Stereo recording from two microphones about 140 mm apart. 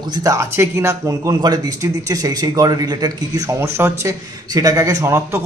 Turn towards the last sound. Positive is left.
turn(degrees=-20)  # may be behind; listen again after turning